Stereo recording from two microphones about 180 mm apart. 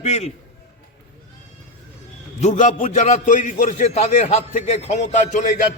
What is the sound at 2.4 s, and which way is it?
A man's voice, 40° left (ahead or behind).